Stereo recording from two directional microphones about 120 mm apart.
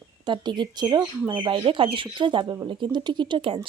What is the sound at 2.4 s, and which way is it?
Speech, 25° right (ahead or behind).